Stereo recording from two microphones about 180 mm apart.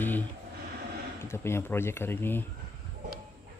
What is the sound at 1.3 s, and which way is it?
Speech, 15° left (ahead or behind).